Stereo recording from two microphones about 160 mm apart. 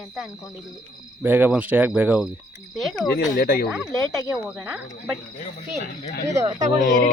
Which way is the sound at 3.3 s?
75° left (ahead or behind).